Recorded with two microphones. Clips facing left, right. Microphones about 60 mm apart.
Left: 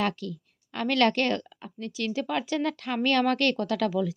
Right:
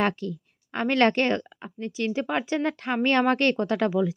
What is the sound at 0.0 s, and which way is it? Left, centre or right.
Speech, right.